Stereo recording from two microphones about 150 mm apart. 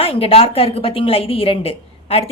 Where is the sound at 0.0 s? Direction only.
40° left (ahead or behind).